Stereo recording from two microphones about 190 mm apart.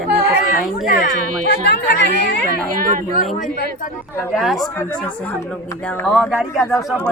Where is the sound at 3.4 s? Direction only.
45° left (ahead or behind).